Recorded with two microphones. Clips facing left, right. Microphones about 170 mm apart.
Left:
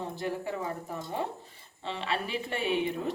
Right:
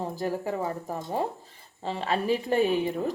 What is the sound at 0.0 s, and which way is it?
A woman's voice, 40° right (ahead or behind).